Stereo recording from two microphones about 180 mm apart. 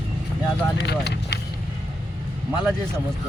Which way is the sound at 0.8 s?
65° left (ahead or behind).